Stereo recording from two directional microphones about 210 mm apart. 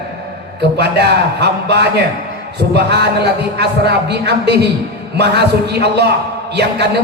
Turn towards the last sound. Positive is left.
turn(degrees=-55)  # may be behind; listen again after turning